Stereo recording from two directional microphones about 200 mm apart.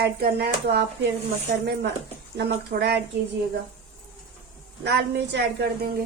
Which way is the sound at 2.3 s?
55° right (ahead or behind).